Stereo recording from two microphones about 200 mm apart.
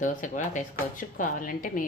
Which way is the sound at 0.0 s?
40° left (ahead or behind).